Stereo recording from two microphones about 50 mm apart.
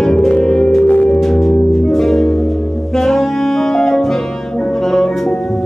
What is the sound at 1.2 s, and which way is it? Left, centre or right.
Music, centre.